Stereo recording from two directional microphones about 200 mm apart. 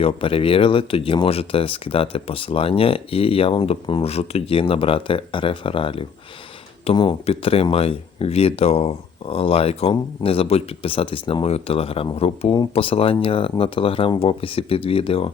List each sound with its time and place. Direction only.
0.0 s speech: 25° left (ahead or behind)